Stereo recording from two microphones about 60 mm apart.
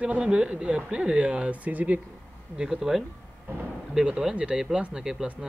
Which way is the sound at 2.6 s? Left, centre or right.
Centre.